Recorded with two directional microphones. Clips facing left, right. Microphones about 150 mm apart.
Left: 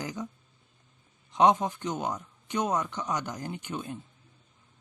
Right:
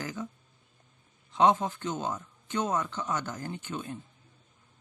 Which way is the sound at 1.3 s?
15° left (ahead or behind).